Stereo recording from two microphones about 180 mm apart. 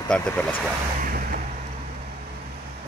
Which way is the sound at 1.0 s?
50° right (ahead or behind).